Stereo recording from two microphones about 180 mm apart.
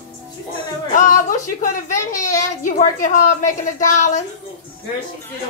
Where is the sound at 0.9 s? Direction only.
45° left (ahead or behind).